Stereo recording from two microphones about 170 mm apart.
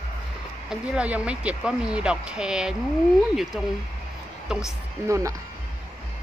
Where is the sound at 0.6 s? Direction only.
5° right (ahead or behind).